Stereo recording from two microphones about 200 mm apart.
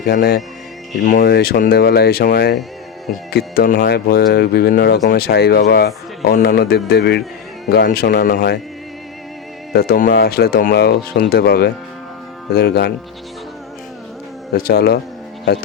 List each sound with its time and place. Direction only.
0.0 s speech: 50° left (ahead or behind)
9.7 s speech: 50° left (ahead or behind)
14.5 s speech: 50° left (ahead or behind)